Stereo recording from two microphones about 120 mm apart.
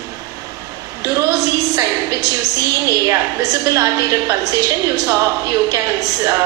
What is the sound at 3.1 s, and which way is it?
A woman's voice, 25° right (ahead or behind).